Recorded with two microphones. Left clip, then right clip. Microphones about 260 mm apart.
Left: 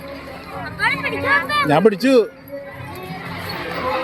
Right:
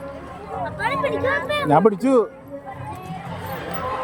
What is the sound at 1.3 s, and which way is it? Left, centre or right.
Speech, centre.